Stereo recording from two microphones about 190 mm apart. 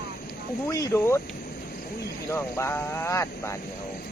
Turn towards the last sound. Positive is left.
turn(degrees=15)  # may be behind; listen again after turning